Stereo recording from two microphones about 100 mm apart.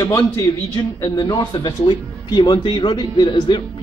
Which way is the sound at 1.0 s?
35° left (ahead or behind).